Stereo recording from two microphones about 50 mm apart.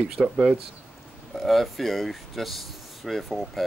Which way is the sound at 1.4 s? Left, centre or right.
Centre.